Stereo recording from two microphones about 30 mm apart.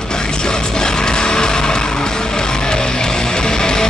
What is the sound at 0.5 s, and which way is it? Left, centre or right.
Music, left.